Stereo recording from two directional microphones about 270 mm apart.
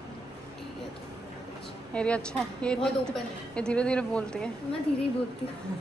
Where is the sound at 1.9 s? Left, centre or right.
Centre.